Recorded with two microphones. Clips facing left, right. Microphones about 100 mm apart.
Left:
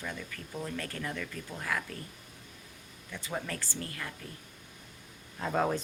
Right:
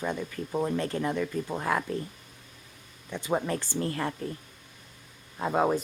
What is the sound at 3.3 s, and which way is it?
Speech, 30° right (ahead or behind).